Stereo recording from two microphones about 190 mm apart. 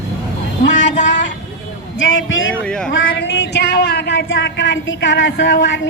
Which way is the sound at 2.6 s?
5° left (ahead or behind).